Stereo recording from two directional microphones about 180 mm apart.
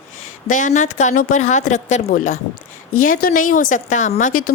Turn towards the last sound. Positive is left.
turn(degrees=50)  # may be behind; listen again after turning